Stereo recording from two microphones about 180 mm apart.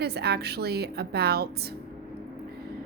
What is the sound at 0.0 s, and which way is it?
A woman's voice, 60° right (ahead or behind).